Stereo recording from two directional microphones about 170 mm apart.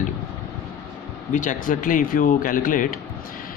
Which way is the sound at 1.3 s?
50° left (ahead or behind).